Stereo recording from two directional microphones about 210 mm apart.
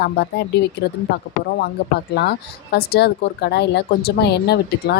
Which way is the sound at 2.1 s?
50° left (ahead or behind).